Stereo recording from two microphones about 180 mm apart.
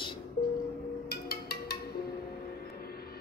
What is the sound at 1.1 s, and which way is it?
Music, 60° left (ahead or behind).